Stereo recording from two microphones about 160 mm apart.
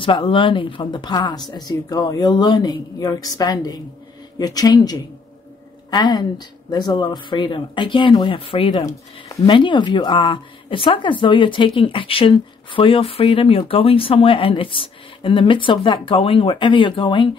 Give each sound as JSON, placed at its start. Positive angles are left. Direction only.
{"t": 0.0, "sound": "speech", "side_deg": 35}